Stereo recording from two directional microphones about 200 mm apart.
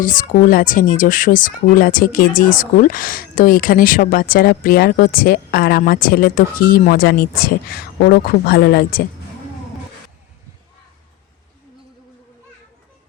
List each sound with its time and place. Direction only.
0.0 s speech: 40° left (ahead or behind)